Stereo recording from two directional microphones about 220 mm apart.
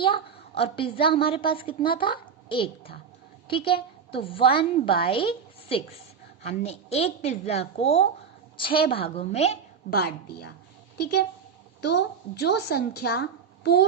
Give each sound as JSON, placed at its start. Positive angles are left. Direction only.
{"t": 0.0, "sound": "a woman's voice", "side_deg": 25}
{"t": 9.9, "sound": "a woman's voice", "side_deg": 45}